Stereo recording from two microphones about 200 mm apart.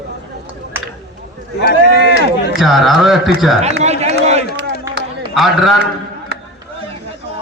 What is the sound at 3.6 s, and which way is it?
Speech, 35° right (ahead or behind).